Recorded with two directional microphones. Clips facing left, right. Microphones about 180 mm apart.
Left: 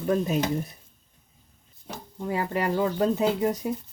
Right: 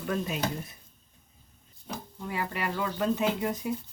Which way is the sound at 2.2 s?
40° left (ahead or behind).